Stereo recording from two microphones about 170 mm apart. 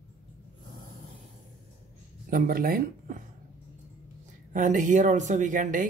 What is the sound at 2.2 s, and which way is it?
Speech, 55° right (ahead or behind).